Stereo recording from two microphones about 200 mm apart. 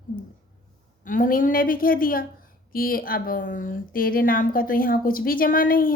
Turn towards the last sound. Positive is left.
turn(degrees=45)  # may be behind; listen again after turning